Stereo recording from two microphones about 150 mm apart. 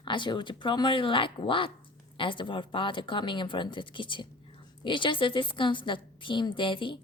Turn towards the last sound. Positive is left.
turn(degrees=35)  # may be behind; listen again after turning